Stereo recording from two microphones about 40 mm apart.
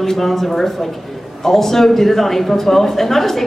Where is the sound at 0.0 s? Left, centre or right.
Centre.